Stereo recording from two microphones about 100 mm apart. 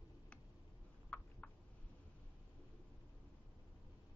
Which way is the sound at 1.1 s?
15° left (ahead or behind).